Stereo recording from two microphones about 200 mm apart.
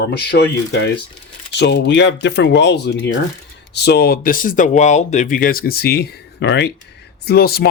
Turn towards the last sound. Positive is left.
turn(degrees=50)  # may be behind; listen again after turning